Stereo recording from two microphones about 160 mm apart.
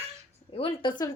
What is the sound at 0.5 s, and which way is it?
Speech, 30° left (ahead or behind).